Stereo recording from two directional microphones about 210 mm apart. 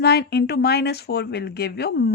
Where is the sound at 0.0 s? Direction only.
50° left (ahead or behind).